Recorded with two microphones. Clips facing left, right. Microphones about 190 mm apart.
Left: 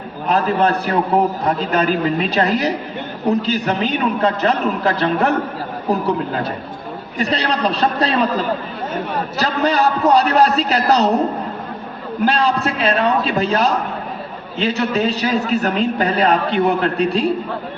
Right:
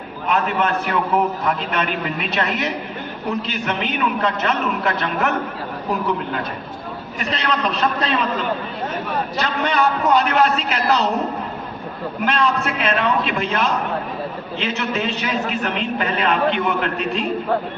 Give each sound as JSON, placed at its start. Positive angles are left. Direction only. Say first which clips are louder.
{"t": 0.3, "sound": "a man's voice", "louder": "left 4 dB", "side_deg": 35}
{"t": 12.2, "sound": "a man's voice", "louder": "left 3 dB", "side_deg": 35}